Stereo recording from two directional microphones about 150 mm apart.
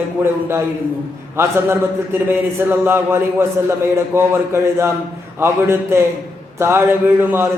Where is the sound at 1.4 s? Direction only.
15° right (ahead or behind).